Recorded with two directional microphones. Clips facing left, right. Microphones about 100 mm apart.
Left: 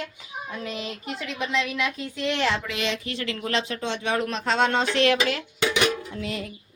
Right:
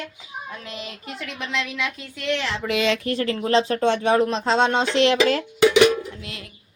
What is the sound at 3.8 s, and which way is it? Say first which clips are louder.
Speech: right 9 dB; 55° right (ahead or behind).